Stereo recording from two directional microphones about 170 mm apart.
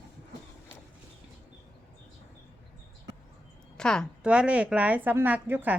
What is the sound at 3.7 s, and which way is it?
Speech, 5° left (ahead or behind).